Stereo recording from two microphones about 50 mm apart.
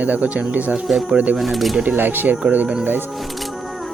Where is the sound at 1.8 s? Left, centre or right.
Right.